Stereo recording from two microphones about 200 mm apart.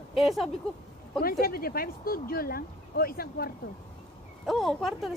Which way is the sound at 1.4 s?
50° left (ahead or behind).